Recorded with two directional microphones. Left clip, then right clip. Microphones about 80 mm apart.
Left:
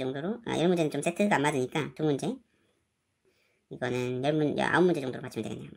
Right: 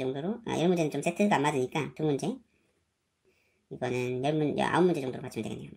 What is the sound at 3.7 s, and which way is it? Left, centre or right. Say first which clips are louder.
Speech: even; left.